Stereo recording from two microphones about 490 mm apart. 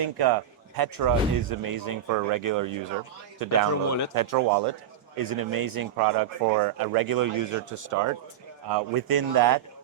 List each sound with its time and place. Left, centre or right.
0.0 s speech: right
3.8 s speech: left
4.1 s speech: right